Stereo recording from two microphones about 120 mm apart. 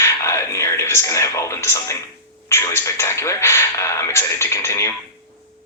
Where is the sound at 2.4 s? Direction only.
20° left (ahead or behind).